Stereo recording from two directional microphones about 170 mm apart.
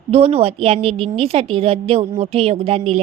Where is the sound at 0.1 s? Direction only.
35° right (ahead or behind).